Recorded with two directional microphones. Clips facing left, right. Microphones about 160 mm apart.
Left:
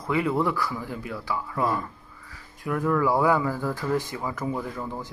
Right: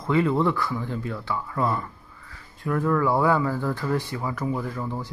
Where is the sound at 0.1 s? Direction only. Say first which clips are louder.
Right 3 dB; 10° left (ahead or behind).